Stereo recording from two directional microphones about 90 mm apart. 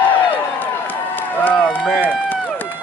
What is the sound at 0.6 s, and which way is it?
Run, 20° left (ahead or behind).